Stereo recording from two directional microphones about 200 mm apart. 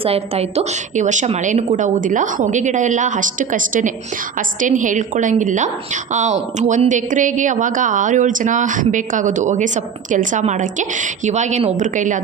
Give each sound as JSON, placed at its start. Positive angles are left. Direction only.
{"t": 0.0, "sound": "a woman's voice", "side_deg": -30}